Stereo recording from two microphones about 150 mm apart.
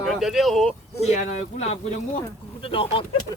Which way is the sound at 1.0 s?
50° left (ahead or behind).